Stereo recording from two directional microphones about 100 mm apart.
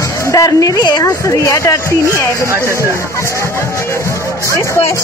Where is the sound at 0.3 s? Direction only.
35° left (ahead or behind).